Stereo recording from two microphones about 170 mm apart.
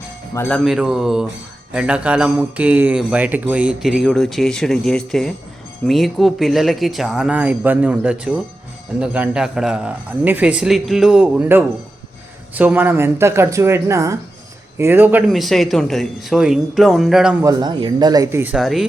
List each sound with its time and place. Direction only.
0.3 s speech: 10° left (ahead or behind)
0.6 s speech: centre (ahead or behind)
15.3 s speech: centre (ahead or behind)
17.4 s speech: 20° right (ahead or behind)
18.5 s speech: centre (ahead or behind)